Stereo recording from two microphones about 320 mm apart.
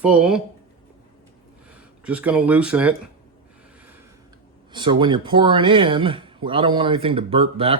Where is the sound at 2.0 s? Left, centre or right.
Centre.